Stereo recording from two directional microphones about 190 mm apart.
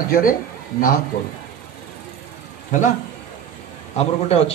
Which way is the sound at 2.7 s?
40° left (ahead or behind).